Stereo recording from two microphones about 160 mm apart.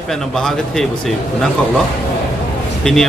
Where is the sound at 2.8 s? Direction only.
5° left (ahead or behind).